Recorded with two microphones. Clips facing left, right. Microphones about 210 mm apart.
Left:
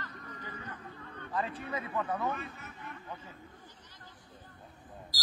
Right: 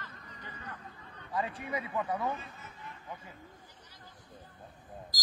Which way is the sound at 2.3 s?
65° left (ahead or behind).